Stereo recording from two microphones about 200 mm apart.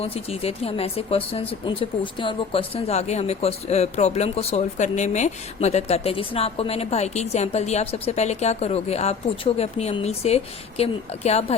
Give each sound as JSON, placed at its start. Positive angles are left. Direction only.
{"t": 0.0, "sound": "speech", "side_deg": 30}